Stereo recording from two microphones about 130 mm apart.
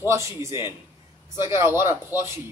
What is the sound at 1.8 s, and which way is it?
Speech, 20° right (ahead or behind).